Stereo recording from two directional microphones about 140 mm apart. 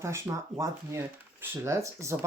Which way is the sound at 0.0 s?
20° right (ahead or behind).